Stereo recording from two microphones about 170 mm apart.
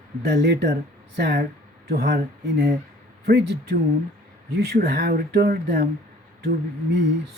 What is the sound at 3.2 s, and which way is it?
Speech, 75° right (ahead or behind).